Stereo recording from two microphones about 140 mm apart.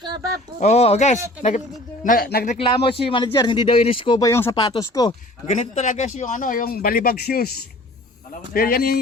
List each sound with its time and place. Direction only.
0.0 s speech: 30° right (ahead or behind)
0.6 s speech: 50° left (ahead or behind)
2.0 s a man's voice: 90° left
2.6 s a man's voice: 40° left (ahead or behind)
3.8 s a man's voice: 40° left (ahead or behind)
4.2 s speech: 20° left (ahead or behind)
4.5 s a man's voice: 30° left (ahead or behind)
5.5 s a man's voice: 60° left (ahead or behind); by 9.0 s 90° left